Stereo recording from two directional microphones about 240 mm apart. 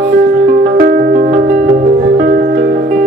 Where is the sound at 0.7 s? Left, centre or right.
Right.